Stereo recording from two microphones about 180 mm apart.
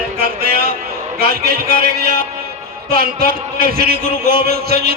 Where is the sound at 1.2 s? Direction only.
60° right (ahead or behind).